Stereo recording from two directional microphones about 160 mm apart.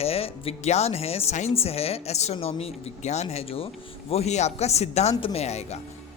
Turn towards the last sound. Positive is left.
turn(degrees=45)  # may be behind; listen again after turning